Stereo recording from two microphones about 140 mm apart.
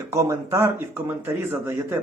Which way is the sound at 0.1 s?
20° right (ahead or behind).